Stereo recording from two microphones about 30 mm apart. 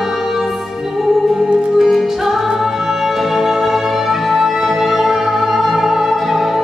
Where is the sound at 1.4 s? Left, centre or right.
Right.